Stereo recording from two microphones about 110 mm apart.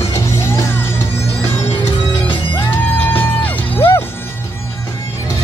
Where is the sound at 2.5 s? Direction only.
15° left (ahead or behind).